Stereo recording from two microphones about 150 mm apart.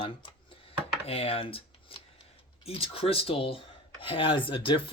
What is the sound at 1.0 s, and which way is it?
Speech, 40° left (ahead or behind).